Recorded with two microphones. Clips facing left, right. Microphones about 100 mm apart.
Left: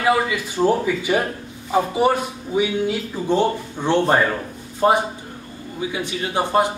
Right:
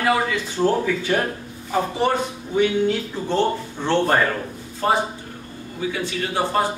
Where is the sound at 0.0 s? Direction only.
10° left (ahead or behind).